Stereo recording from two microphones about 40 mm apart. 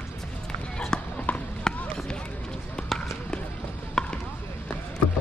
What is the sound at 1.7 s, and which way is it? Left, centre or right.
Run, centre.